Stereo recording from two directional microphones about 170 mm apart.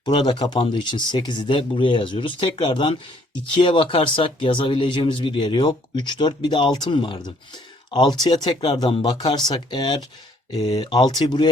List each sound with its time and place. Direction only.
0.0 s speech: 30° left (ahead or behind)